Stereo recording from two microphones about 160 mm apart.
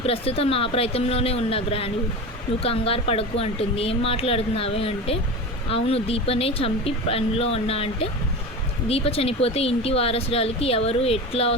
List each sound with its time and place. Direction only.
0.0 s speech: 35° left (ahead or behind)